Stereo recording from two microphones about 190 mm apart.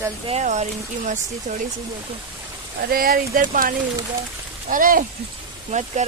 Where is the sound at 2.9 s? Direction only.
50° right (ahead or behind).